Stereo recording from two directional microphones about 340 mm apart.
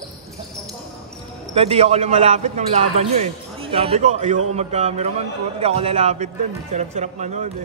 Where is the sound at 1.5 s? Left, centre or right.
Centre.